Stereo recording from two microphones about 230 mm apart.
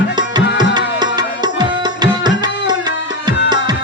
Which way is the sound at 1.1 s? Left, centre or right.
Centre.